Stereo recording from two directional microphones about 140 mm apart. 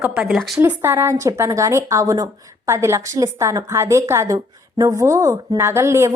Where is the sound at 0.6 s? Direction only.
15° right (ahead or behind).